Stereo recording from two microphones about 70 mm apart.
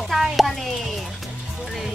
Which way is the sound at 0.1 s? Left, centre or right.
Centre.